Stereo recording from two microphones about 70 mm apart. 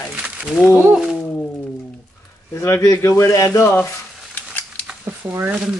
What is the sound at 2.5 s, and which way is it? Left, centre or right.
Speech, left.